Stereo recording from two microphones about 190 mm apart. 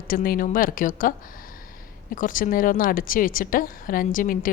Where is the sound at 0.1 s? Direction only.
50° left (ahead or behind).